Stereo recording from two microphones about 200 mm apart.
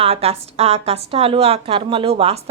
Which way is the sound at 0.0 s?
30° right (ahead or behind).